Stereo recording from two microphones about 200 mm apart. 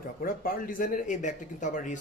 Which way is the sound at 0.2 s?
45° left (ahead or behind).